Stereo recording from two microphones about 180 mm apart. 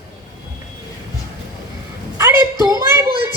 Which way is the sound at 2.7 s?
15° right (ahead or behind).